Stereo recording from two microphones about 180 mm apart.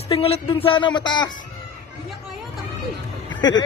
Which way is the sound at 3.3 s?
25° left (ahead or behind).